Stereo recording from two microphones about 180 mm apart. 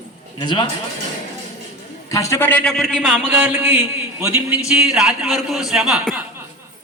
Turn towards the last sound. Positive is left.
turn(degrees=0)  # may be behind; listen again after turning